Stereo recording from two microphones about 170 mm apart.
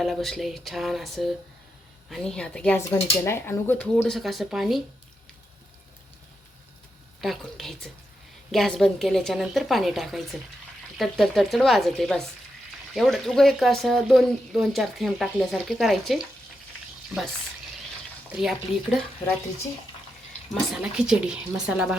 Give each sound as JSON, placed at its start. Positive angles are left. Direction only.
{"t": 0.0, "sound": "speech", "side_deg": 0}
{"t": 3.9, "sound": "speech", "side_deg": 0}
{"t": 7.2, "sound": "speech", "side_deg": 0}
{"t": 18.3, "sound": "speech", "side_deg": -5}
{"t": 20.5, "sound": "speech", "side_deg": -5}